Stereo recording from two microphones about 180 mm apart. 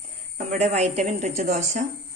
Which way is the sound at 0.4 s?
40° right (ahead or behind).